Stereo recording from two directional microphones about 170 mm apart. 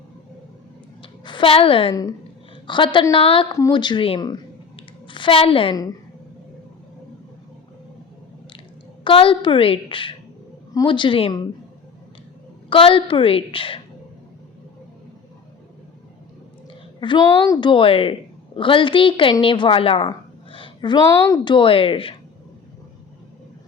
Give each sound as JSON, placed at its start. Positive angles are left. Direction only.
{"t": 1.0, "sound": "a woman's voice", "side_deg": 30}
{"t": 4.8, "sound": "shuffling cards", "side_deg": 30}
{"t": 9.0, "sound": "a woman's voice", "side_deg": 30}
{"t": 12.7, "sound": "a woman's voice", "side_deg": 30}
{"t": 17.0, "sound": "a woman's voice", "side_deg": 25}